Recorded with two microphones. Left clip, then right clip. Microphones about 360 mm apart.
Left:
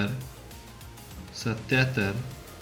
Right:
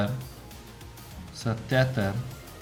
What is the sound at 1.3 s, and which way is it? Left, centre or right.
Speech, right.